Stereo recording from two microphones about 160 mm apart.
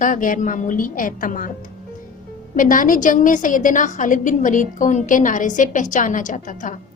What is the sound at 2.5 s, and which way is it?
A woman's voice, 55° left (ahead or behind).